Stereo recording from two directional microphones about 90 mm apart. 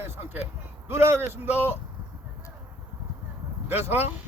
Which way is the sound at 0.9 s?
30° right (ahead or behind).